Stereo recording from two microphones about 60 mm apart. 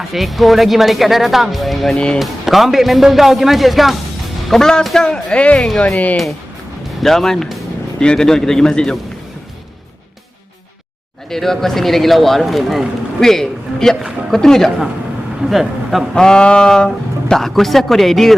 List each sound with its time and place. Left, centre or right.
0.1 s a man's voice: centre
5.5 s speech: centre
7.0 s a man's voice: centre
11.3 s a man's voice: centre
16.1 s speech: centre